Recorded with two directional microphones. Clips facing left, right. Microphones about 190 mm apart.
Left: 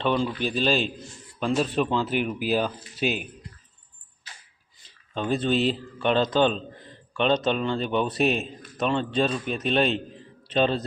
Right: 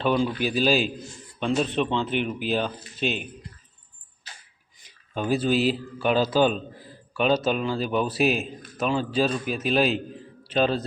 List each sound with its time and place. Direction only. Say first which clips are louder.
0.0 s speech: right 1 dB; 5° right (ahead or behind)
4.8 s speech: right 1 dB; 10° right (ahead or behind)